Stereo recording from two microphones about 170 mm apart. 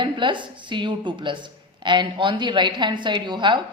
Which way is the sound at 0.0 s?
30° right (ahead or behind).